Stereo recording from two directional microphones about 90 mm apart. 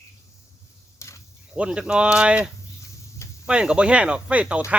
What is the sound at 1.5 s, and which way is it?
Speech, 10° right (ahead or behind).